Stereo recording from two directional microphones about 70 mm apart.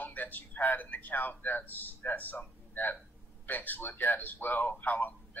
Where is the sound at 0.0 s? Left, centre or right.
Left.